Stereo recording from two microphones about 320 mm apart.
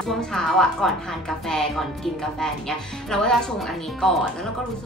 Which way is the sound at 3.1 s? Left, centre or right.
Centre.